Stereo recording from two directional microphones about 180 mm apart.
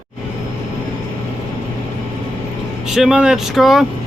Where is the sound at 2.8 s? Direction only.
Centre (ahead or behind).